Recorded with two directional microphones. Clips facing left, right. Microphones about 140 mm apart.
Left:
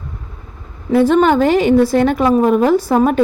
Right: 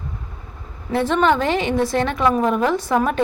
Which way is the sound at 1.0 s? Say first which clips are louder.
Left 5 dB; 40° left (ahead or behind).